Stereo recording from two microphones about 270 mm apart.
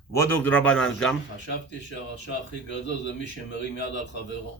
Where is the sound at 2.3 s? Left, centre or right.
Left.